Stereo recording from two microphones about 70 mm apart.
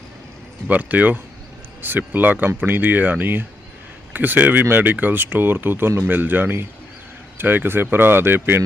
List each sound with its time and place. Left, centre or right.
0.7 s speech: right